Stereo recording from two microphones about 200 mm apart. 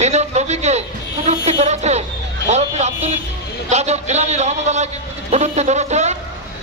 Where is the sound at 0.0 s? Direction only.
35° right (ahead or behind).